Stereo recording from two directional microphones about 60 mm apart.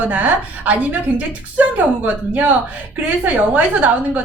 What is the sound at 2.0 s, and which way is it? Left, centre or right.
A woman's voice, right.